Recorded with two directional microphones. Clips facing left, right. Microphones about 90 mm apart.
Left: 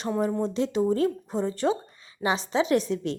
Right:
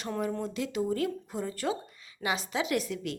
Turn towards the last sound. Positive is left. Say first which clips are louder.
# left 7 dB
turn(degrees=30)  # may be behind; listen again after turning